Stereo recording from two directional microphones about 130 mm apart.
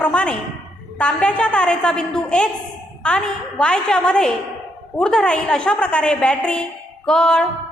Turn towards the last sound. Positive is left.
turn(degrees=5)  # may be behind; listen again after turning